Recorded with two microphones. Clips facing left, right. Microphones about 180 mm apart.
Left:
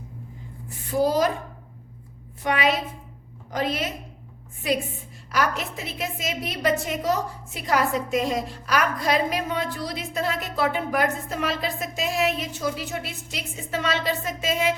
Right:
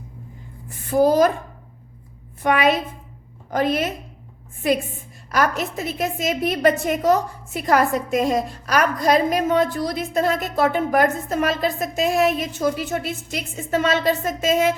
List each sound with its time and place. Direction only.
0.9 s a woman's voice: 50° right (ahead or behind)
2.4 s a woman's voice: 50° right (ahead or behind)